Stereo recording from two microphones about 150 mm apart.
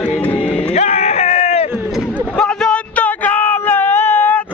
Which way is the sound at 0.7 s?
45° left (ahead or behind).